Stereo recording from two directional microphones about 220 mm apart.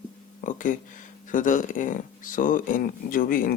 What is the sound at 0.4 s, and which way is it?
Speech, 35° left (ahead or behind).